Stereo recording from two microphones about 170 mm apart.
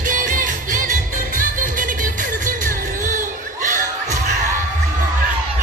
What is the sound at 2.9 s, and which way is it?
Crowd, 50° right (ahead or behind).